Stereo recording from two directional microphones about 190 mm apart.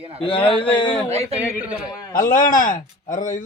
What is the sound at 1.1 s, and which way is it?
Speech, 35° right (ahead or behind).